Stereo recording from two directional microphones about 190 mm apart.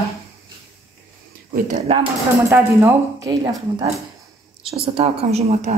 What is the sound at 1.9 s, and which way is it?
Speech, 35° right (ahead or behind).